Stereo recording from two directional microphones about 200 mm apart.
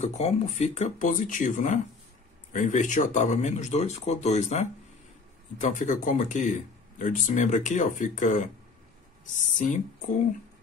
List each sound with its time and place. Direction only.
0.0 s speech: 30° left (ahead or behind)